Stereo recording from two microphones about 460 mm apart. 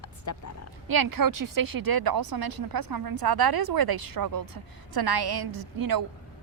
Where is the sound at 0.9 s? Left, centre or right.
Right.